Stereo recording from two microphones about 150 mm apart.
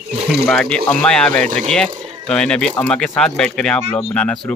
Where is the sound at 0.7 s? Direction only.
10° left (ahead or behind).